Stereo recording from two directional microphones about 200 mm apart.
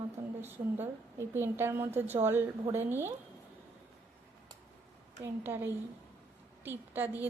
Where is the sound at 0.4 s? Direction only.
10° right (ahead or behind).